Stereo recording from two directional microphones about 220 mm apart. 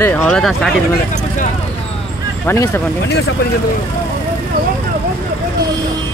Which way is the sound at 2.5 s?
10° left (ahead or behind).